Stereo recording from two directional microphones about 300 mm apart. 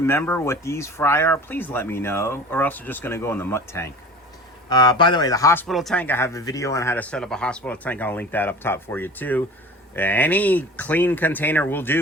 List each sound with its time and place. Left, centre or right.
0.0 s speech: centre